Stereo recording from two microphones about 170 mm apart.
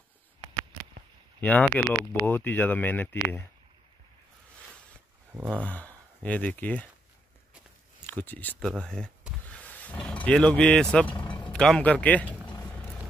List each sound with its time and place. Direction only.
1.4 s speech: 10° left (ahead or behind)
5.3 s speech: 10° right (ahead or behind)
5.6 s speech: 10° left (ahead or behind)
8.1 s speech: 10° left (ahead or behind)
9.5 s vehicle: 10° left (ahead or behind)
11.5 s speech: 5° left (ahead or behind)
12.4 s a sound: 25° left (ahead or behind)
12.7 s vehicle: 10° left (ahead or behind)